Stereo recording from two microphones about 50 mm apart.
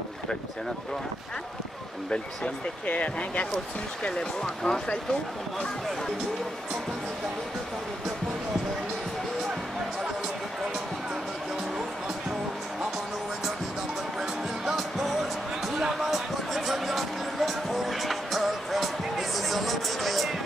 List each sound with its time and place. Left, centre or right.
2.9 s speech: left
4.0 s speech: centre
14.7 s music: centre